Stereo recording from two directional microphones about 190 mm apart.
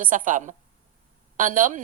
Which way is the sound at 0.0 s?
45° right (ahead or behind).